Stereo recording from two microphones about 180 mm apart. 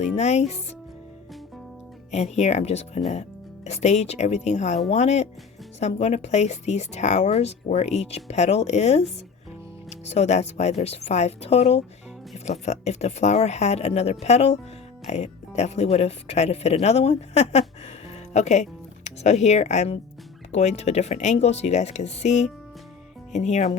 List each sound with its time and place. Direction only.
0.0 s speech: 40° left (ahead or behind)
2.1 s speech: 40° left (ahead or behind)
10.1 s speech: 40° left (ahead or behind)